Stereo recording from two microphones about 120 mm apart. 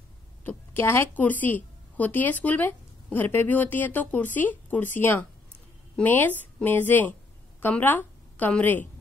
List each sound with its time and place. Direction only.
0.4 s a woman's voice: 20° left (ahead or behind)